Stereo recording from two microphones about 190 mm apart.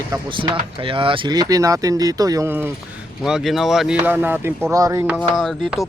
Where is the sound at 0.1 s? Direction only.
25° right (ahead or behind).